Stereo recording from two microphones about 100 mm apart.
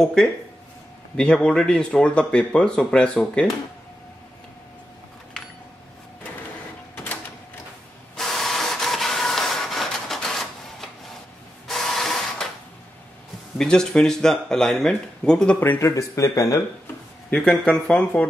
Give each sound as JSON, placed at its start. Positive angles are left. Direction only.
{"t": 0.0, "sound": "speech", "side_deg": 5}
{"t": 8.2, "sound": "printer", "side_deg": 5}
{"t": 13.6, "sound": "speech", "side_deg": 5}
{"t": 15.8, "sound": "speech", "side_deg": 35}
{"t": 17.5, "sound": "speech", "side_deg": 10}